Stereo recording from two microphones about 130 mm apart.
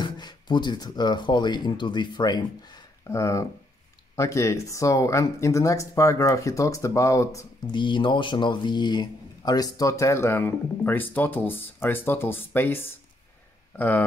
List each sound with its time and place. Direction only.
0.0 s speech: 35° left (ahead or behind)
3.1 s speech: 20° left (ahead or behind)
7.7 s speech: 35° left (ahead or behind); by 14.0 s 15° left (ahead or behind)